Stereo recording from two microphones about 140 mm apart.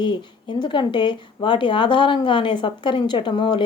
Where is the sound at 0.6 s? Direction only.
35° left (ahead or behind).